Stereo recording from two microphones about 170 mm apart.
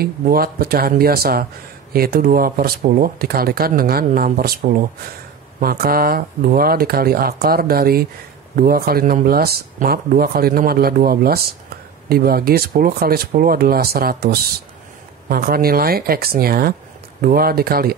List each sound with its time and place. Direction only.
0.0 s speech: 60° right (ahead or behind)